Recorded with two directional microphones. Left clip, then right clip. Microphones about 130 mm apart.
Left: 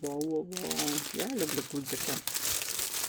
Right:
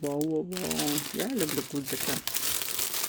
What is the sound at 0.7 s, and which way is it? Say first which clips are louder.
Speech: right 1 dB; 10° right (ahead or behind).